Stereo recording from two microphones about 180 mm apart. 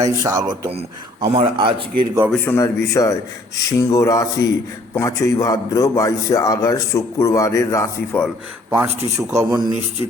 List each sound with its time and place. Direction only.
0.0 s speech: 20° right (ahead or behind)
0.7 s speech: 30° right (ahead or behind)
2.3 s a man's voice: 10° left (ahead or behind)
8.9 s speech: 35° right (ahead or behind)
9.1 s speech: 15° right (ahead or behind)